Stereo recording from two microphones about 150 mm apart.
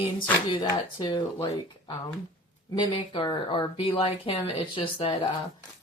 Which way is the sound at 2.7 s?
30° left (ahead or behind).